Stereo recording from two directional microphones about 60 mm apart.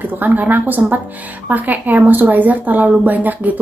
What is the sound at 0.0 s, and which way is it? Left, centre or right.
Speech, right.